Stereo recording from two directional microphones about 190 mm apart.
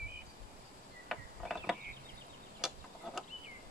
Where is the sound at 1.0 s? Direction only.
Centre (ahead or behind).